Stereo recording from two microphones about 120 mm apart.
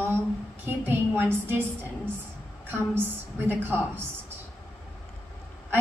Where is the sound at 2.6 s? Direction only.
15° right (ahead or behind).